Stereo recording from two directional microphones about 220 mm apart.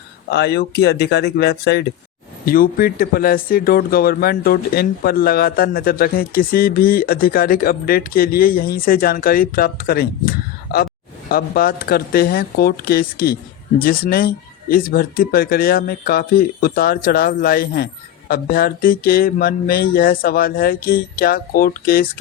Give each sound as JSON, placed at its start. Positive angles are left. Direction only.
{"t": 0.3, "sound": "speech", "side_deg": 50}